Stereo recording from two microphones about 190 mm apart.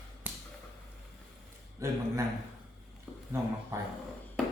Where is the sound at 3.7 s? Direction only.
15° right (ahead or behind).